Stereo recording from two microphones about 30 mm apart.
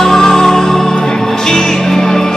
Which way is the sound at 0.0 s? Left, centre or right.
Centre.